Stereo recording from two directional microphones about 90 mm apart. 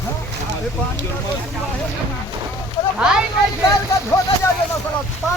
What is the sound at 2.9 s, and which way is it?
Speech, 10° right (ahead or behind).